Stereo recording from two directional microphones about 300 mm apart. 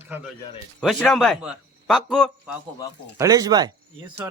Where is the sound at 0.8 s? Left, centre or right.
Centre.